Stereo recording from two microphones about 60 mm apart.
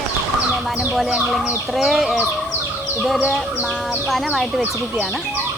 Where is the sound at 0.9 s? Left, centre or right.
Centre.